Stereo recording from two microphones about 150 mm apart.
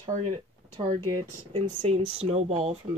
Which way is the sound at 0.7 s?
35° right (ahead or behind).